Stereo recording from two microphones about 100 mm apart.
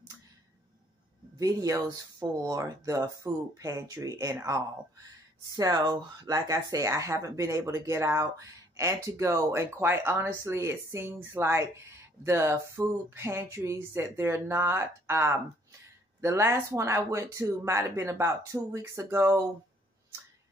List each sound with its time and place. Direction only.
1.4 s speech: 35° right (ahead or behind)